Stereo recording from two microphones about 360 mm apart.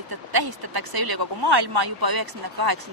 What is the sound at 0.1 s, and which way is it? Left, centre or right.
Speech, right.